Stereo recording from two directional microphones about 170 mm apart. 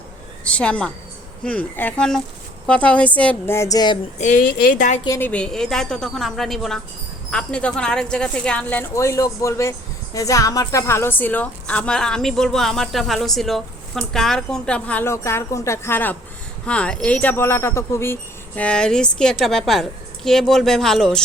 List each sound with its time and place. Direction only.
0.4 s a woman's voice: 5° left (ahead or behind)
4.2 s speech: 50° left (ahead or behind)
5.0 s a woman's voice: 20° left (ahead or behind)
5.3 s a woman's voice: 5° left (ahead or behind)